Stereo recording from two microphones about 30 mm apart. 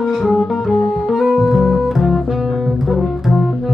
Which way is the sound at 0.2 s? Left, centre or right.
Centre.